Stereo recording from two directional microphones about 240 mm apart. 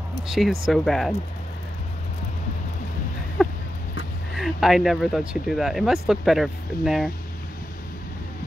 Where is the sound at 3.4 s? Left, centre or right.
Centre.